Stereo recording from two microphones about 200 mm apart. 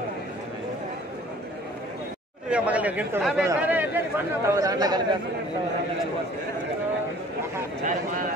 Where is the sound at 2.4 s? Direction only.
5° right (ahead or behind).